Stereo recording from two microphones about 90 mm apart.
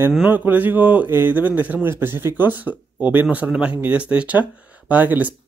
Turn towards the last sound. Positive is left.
turn(degrees=-20)  # may be behind; listen again after turning